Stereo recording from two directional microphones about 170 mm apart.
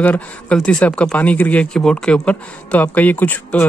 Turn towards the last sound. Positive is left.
turn(degrees=10)  # may be behind; listen again after turning